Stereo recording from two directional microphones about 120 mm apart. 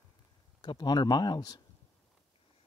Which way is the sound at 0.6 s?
40° left (ahead or behind).